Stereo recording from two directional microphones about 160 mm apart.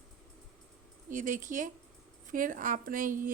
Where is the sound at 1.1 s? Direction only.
55° right (ahead or behind).